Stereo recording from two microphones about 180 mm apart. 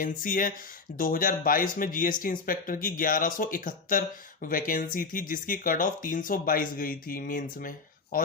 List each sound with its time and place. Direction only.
0.0 s speech: 50° left (ahead or behind)